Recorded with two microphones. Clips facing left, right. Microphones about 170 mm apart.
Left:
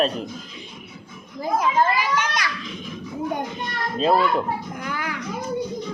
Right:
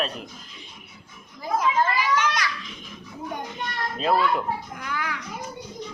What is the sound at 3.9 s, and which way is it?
Speech, 25° left (ahead or behind).